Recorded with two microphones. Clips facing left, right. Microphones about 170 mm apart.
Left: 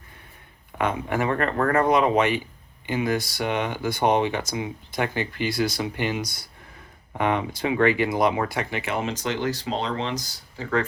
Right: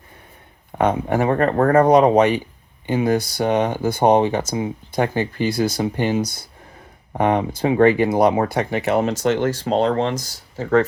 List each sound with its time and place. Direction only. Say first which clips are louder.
0.8 s speech: right 6 dB; 40° right (ahead or behind)